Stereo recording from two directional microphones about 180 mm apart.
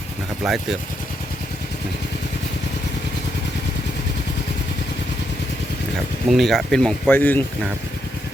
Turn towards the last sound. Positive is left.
turn(degrees=10)  # may be behind; listen again after turning